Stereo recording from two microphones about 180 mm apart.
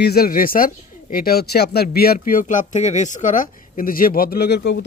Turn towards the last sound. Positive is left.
turn(degrees=65)  # may be behind; listen again after turning